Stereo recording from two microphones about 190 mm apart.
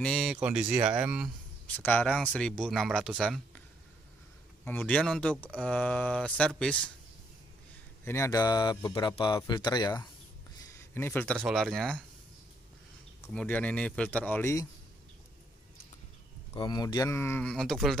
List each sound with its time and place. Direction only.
0.0 s speech: centre (ahead or behind)
1.8 s speech: 10° left (ahead or behind)
4.6 s speech: 5° left (ahead or behind)
8.0 s speech: 15° left (ahead or behind)
10.7 s speech: 10° left (ahead or behind)
13.3 s speech: 5° left (ahead or behind)
16.5 s speech: 20° left (ahead or behind); by 17.9 s centre (ahead or behind)